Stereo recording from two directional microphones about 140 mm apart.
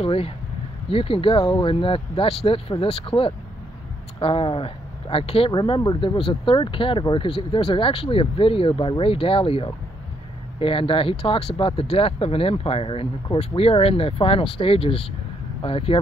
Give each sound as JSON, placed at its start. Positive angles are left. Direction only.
{"t": 0.0, "sound": "speech", "side_deg": 40}